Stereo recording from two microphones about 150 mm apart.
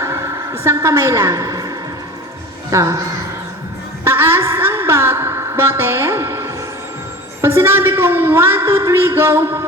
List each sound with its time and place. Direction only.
0.0 s a sound: 20° right (ahead or behind)
2.6 s a woman's voice: 20° right (ahead or behind)
4.0 s a woman's voice: 15° right (ahead or behind)